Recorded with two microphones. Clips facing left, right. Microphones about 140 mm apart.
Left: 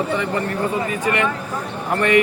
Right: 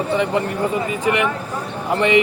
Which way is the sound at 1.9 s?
15° right (ahead or behind).